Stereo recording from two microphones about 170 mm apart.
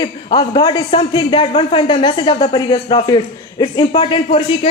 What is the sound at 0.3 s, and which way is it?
A man's voice, 25° left (ahead or behind).